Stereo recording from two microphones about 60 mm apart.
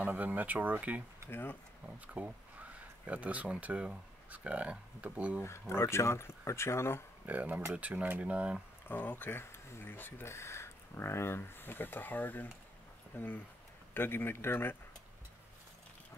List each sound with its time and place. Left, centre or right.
0.0 s speech: right
1.3 s speech: left
2.1 s speech: right
5.4 s speech: left
7.2 s speech: right
8.8 s speech: left
10.2 s speech: left